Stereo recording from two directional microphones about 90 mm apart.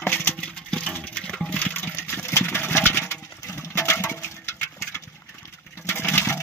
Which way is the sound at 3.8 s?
25° left (ahead or behind).